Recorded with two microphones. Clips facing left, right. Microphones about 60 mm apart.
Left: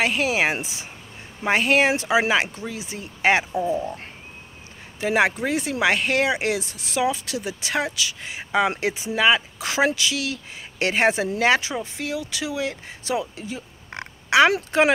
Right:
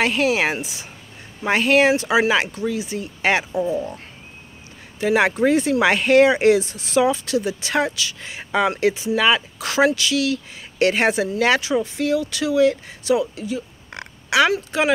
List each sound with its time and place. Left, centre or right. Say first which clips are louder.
0.0 s speech: right 2 dB; centre
0.5 s speech: right 1 dB; left
5.0 s speech: right 4 dB; centre
13.0 s oink: right 6 dB; left
14.7 s speech: left 2 dB; left